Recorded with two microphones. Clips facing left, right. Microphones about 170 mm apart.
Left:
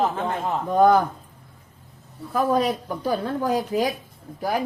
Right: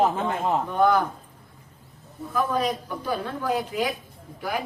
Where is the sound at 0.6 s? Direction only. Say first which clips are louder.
Left 6 dB; 40° left (ahead or behind).